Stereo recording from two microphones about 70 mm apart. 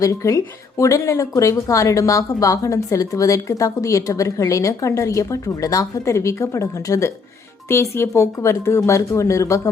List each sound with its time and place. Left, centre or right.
0.0 s a woman's voice: left